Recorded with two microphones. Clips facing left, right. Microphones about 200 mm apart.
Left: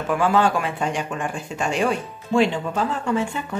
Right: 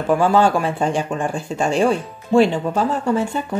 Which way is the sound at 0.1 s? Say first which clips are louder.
Right 4 dB; 30° right (ahead or behind).